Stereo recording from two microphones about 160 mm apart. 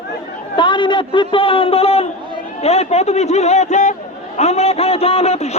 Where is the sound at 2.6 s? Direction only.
40° left (ahead or behind).